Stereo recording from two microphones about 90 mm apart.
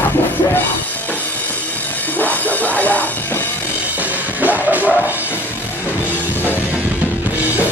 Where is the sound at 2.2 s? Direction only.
20° left (ahead or behind).